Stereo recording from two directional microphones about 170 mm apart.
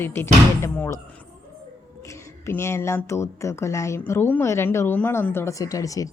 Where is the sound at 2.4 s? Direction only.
15° left (ahead or behind).